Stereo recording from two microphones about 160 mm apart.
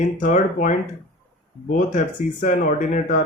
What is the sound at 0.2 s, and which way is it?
Speech, 50° left (ahead or behind).